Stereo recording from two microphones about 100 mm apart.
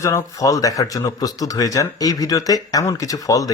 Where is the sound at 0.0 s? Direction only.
30° left (ahead or behind).